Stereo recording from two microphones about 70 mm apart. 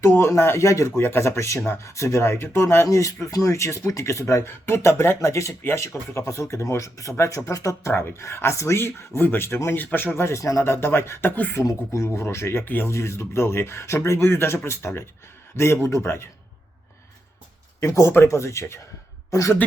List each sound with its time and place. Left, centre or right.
0.0 s speech: left
2.8 s speech: left
8.2 s speech: left
11.6 s speech: left
12.6 s speech: left
12.9 s speech: left
17.7 s a woman's voice: left